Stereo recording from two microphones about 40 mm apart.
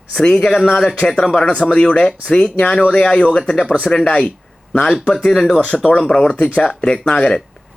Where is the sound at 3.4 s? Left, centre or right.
Left.